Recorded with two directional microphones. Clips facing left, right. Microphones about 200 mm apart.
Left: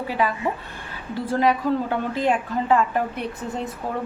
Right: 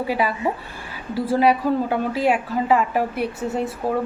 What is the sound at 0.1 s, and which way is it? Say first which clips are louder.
Speech: even; 10° right (ahead or behind).